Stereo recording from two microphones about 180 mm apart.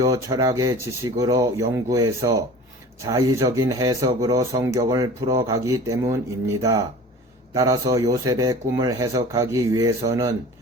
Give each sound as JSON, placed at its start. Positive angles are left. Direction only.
{"t": 0.0, "sound": "speech", "side_deg": -20}